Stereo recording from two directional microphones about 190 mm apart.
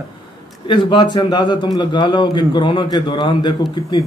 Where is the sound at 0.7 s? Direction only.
25° left (ahead or behind).